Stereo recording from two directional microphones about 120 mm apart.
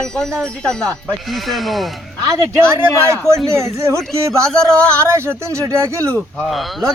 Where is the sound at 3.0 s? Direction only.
25° right (ahead or behind).